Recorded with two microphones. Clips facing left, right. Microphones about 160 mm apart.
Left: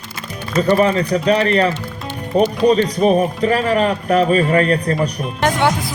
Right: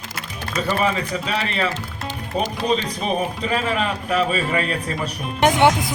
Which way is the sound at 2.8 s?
50° left (ahead or behind).